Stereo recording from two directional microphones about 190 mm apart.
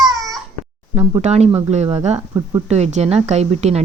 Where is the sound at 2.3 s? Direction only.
20° right (ahead or behind).